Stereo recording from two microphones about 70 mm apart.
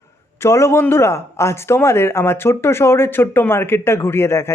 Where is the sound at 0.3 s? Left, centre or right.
Left.